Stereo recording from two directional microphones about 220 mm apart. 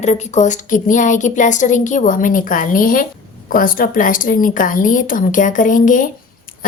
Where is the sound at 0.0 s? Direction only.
30° left (ahead or behind).